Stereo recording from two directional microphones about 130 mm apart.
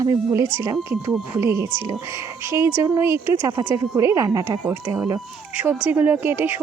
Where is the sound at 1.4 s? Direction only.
20° right (ahead or behind).